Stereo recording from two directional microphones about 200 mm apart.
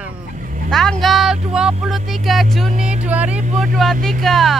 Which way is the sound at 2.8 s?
5° right (ahead or behind).